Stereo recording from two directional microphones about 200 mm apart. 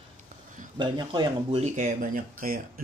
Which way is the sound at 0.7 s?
20° right (ahead or behind).